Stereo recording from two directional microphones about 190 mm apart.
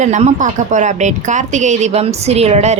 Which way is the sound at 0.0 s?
40° right (ahead or behind).